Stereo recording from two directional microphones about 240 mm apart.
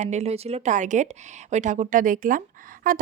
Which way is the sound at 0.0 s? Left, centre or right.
Right.